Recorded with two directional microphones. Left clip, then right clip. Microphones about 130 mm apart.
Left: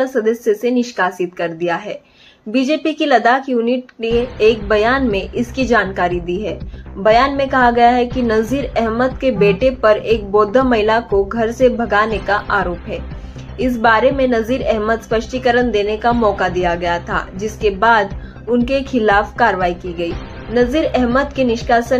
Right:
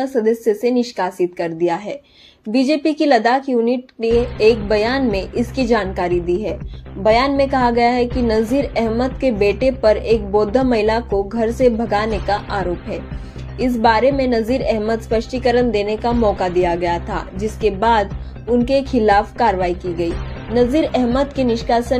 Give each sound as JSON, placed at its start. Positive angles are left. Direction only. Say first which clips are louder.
{"t": 0.0, "sound": "a woman's voice", "louder": "left 1 dB", "side_deg": -35}
{"t": 18.7, "sound": "a woman's voice", "louder": "right 1 dB", "side_deg": -35}